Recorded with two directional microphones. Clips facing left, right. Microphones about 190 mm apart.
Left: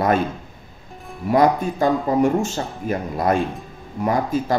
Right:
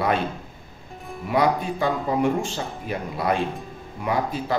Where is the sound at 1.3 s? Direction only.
45° left (ahead or behind).